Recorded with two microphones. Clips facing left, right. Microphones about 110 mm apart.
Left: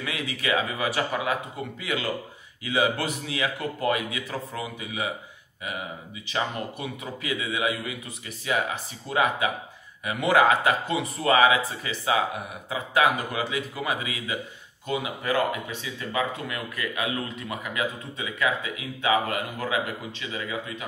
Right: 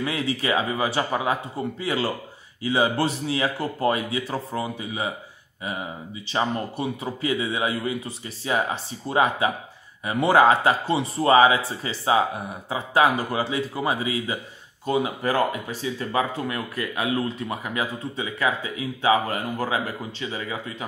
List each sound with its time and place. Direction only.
0.0 s speech: 30° right (ahead or behind)
6.3 s speech: 30° right (ahead or behind)